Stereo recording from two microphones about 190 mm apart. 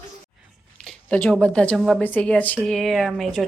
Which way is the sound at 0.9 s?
5° left (ahead or behind).